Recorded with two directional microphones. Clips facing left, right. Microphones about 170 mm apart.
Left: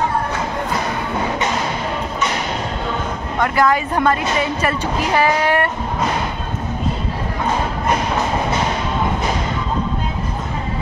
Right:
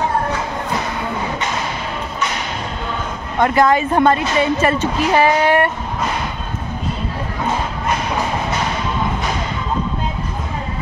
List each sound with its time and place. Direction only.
3.3 s speech: 25° right (ahead or behind)